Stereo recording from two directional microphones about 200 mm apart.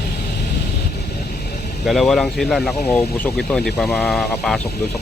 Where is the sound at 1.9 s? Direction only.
Centre (ahead or behind).